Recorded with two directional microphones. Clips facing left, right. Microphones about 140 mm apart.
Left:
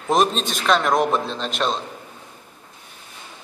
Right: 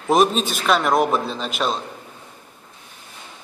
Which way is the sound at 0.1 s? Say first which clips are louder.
Right 2 dB; 5° right (ahead or behind).